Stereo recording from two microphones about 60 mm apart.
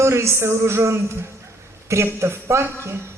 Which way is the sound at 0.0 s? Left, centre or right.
Right.